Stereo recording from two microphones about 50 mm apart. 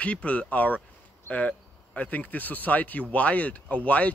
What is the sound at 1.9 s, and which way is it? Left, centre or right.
Speech, left.